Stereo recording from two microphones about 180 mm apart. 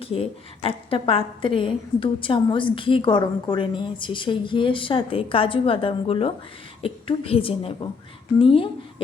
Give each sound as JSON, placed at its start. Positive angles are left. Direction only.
{"t": 0.0, "sound": "a woman's voice", "side_deg": 30}